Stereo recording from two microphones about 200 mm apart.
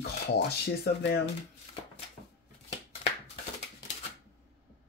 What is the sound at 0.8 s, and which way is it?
Speech, 55° left (ahead or behind).